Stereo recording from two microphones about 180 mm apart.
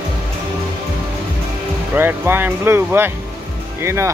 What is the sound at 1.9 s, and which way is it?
Speech, 10° right (ahead or behind).